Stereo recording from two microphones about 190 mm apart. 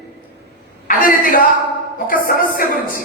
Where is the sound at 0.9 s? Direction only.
45° left (ahead or behind).